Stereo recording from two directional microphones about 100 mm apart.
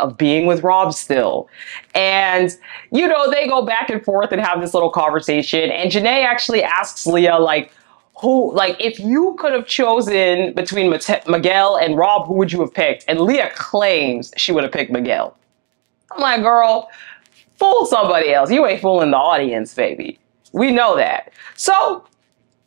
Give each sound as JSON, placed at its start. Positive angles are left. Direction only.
{"t": 0.0, "sound": "speech", "side_deg": -25}